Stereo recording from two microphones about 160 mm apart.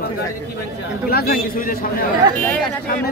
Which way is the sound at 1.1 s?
70° left (ahead or behind).